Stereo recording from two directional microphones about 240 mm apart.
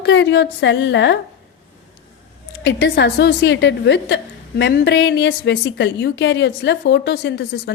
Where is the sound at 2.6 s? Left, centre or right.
Left.